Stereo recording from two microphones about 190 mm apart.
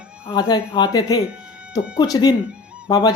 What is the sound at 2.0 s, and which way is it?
Speech, 20° left (ahead or behind).